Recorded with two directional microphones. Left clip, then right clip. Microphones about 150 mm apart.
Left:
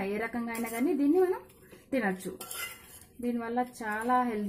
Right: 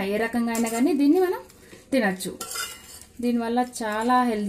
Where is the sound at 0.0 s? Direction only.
30° right (ahead or behind).